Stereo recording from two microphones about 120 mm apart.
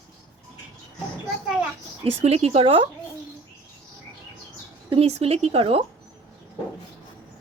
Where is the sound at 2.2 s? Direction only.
60° right (ahead or behind).